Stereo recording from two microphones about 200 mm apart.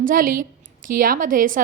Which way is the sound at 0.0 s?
45° right (ahead or behind).